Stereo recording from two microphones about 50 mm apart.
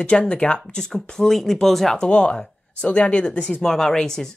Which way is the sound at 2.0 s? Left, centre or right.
Left.